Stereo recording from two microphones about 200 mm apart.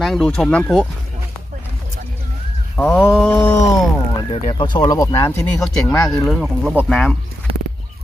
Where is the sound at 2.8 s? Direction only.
10° left (ahead or behind).